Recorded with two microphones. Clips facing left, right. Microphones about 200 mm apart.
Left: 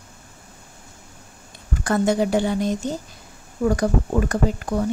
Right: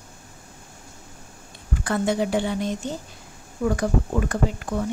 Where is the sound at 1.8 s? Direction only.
45° left (ahead or behind).